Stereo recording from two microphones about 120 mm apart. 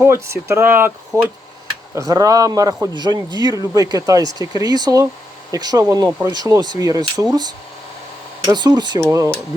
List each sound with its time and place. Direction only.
0.0 s speech: 25° right (ahead or behind)
2.0 s speech: 30° right (ahead or behind)
8.4 s speech: 35° right (ahead or behind)
9.0 s speech: 25° right (ahead or behind)